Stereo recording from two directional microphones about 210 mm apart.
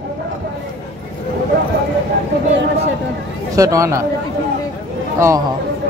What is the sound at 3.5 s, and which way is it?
Speech, 15° right (ahead or behind).